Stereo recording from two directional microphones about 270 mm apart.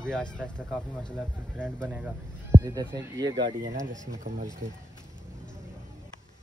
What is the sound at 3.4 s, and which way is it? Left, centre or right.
Speech, right.